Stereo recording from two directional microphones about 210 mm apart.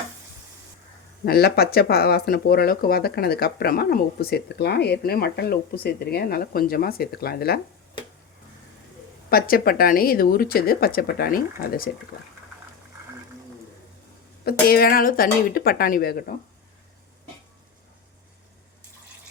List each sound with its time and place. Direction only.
1.2 s speech: 50° left (ahead or behind)
9.3 s speech: 45° left (ahead or behind)
14.4 s speech: 45° left (ahead or behind)